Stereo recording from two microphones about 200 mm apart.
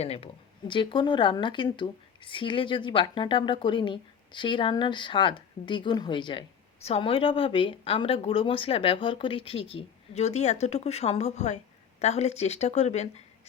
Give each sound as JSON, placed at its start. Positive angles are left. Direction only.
{"t": 0.0, "sound": "speech", "side_deg": 30}